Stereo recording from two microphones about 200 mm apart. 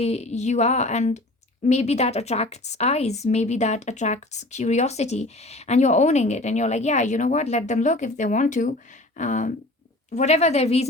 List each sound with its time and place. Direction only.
0.0 s a woman's voice: 30° left (ahead or behind)